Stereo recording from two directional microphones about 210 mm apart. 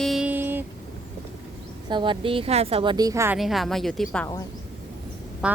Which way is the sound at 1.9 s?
20° right (ahead or behind).